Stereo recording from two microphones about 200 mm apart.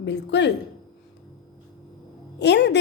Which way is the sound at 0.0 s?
60° left (ahead or behind).